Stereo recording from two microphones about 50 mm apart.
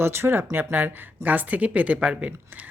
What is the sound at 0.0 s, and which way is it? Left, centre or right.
Speech, right.